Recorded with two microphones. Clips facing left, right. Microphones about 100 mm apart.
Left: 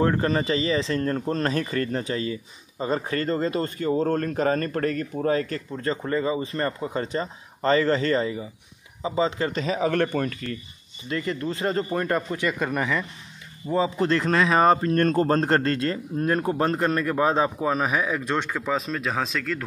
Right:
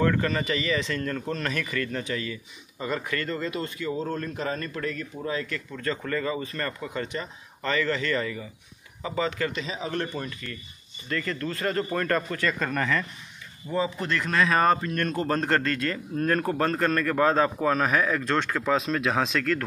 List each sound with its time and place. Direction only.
0.0 s speech: 30° left (ahead or behind)
5.7 s a man's voice: 30° left (ahead or behind)
9.5 s speech: 45° left (ahead or behind)
11.1 s a man's voice: 20° left (ahead or behind)
13.7 s a man's voice: 30° left (ahead or behind); by 18.8 s 10° left (ahead or behind)
18.8 s speech: centre (ahead or behind)